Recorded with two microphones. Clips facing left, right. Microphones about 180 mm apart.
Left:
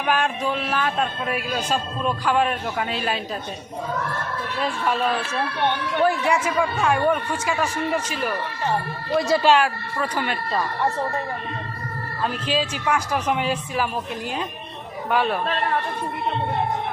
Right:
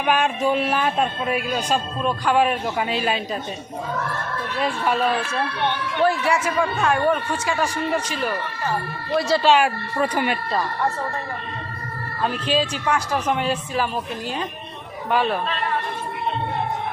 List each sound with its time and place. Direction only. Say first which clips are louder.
0.0 s music: right 2 dB; centre (ahead or behind)
0.4 s speech: right 4 dB; 15° right (ahead or behind)
1.3 s a man's voice: right 2 dB; centre (ahead or behind)
4.6 s speech: right 2 dB; 5° right (ahead or behind)
6.0 s a man's voice: right 1 dB; 10° left (ahead or behind)
9.2 s a man's voice: even; 15° left (ahead or behind)
9.6 s speech: right 4 dB; 15° right (ahead or behind)
12.2 s a man's voice: right 2 dB; centre (ahead or behind)
15.1 s a man's voice: right 1 dB; centre (ahead or behind)